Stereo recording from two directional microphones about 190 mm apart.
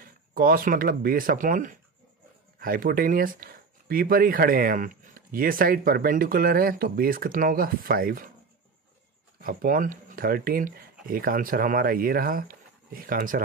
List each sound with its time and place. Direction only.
0.0 s speech: 50° right (ahead or behind)
9.4 s speech: 50° right (ahead or behind)